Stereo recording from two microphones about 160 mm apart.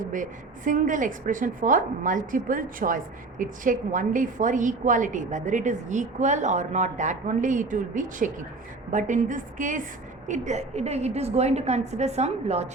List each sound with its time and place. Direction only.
0.0 s a woman's voice: 55° right (ahead or behind)